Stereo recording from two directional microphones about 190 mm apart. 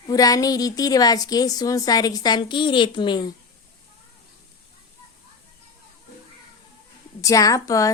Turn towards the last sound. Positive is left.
turn(degrees=15)  # may be behind; listen again after turning